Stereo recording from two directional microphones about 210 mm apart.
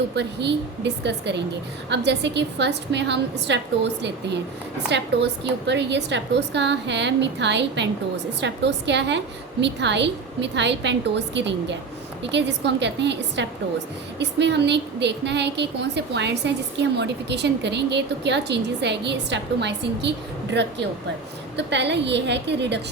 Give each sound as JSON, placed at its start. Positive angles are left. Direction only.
{"t": 0.2, "sound": "a woman's voice", "side_deg": -55}